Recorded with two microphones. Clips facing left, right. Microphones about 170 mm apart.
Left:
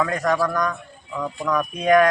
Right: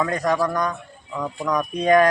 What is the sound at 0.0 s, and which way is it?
Speech, 15° right (ahead or behind).